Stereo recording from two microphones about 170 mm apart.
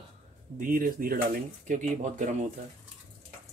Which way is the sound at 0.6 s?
55° right (ahead or behind).